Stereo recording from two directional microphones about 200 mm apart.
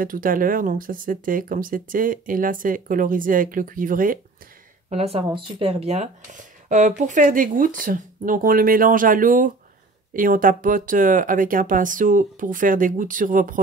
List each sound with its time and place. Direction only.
0.0 s speech: 45° right (ahead or behind)
4.8 s speech: 30° right (ahead or behind)